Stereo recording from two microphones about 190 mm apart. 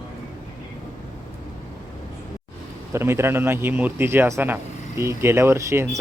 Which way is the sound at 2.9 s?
15° right (ahead or behind).